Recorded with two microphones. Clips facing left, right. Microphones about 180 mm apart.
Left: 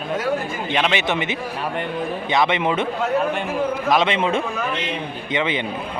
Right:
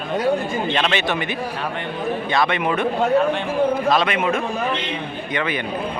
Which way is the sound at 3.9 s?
20° left (ahead or behind).